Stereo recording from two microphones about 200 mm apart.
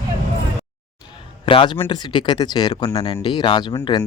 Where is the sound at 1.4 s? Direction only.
25° left (ahead or behind).